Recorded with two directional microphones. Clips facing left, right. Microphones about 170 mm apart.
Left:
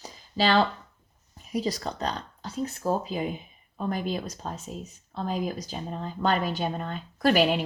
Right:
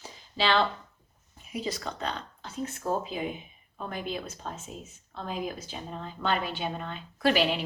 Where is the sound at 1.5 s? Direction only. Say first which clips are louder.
Left 5 dB; 35° left (ahead or behind).